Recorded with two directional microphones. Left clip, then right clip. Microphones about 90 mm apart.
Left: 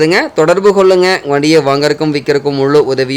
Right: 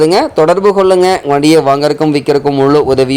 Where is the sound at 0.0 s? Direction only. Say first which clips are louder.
Right 2 dB; 30° right (ahead or behind).